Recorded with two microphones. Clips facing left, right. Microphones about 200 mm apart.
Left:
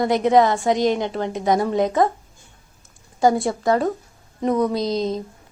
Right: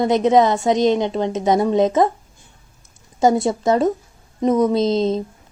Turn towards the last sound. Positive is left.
turn(degrees=-25)  # may be behind; listen again after turning